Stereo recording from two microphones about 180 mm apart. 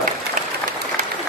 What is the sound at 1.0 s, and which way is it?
Applause, 50° right (ahead or behind).